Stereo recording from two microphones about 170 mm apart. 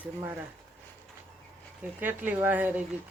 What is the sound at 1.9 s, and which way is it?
Speech, 10° right (ahead or behind).